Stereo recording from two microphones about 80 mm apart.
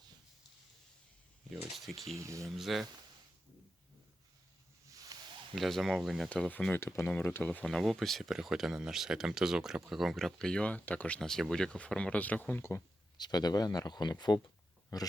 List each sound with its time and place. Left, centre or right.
1.7 s speech: centre
2.1 s speech: right
2.5 s speech: centre
4.9 s a sound: right
5.5 s speech: centre
6.2 s speech: centre
6.7 s speech: left
7.0 s speech: centre
7.6 s speech: centre
11.2 s speech: centre; by 12.8 s left
13.1 s speech: left
14.9 s speech: left